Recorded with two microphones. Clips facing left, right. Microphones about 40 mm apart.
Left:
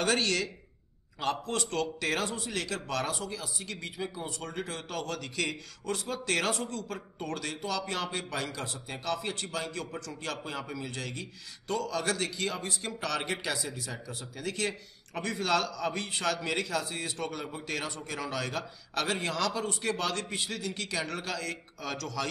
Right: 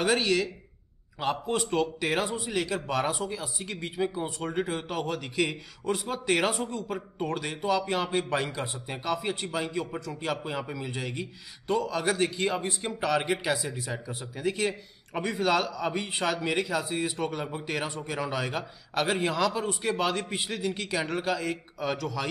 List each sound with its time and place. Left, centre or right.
0.0 s a man's voice: centre